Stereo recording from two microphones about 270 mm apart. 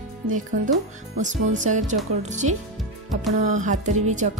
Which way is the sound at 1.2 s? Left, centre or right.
Right.